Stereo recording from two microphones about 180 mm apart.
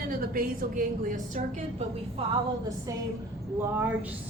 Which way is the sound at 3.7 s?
10° right (ahead or behind).